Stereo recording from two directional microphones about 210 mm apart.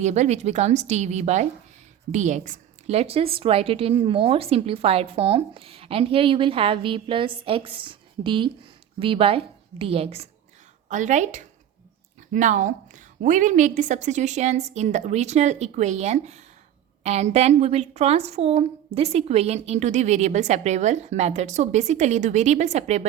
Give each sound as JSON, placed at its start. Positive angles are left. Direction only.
{"t": 0.0, "sound": "a woman's voice", "side_deg": -30}